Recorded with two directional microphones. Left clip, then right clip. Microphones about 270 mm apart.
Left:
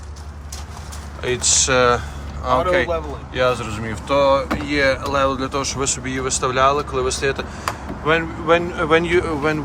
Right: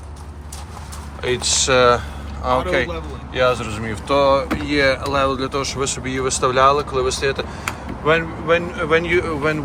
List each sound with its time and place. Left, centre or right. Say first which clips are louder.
1.2 s speech: even; centre